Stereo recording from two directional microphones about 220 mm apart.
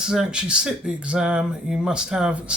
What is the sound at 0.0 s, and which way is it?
Speech, 5° right (ahead or behind).